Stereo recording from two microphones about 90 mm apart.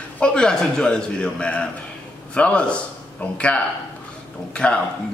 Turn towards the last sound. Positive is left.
turn(degrees=10)  # may be behind; listen again after turning